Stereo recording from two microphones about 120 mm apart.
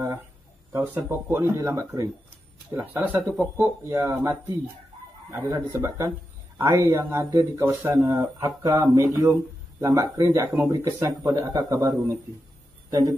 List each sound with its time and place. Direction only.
0.9 s speech: 20° right (ahead or behind)